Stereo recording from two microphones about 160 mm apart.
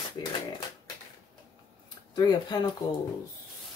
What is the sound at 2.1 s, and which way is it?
Speech, 25° left (ahead or behind).